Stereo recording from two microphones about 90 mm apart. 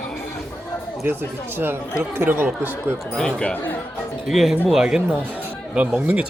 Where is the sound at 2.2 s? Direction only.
20° right (ahead or behind).